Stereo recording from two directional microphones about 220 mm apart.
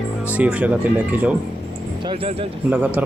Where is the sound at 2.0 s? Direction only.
25° right (ahead or behind).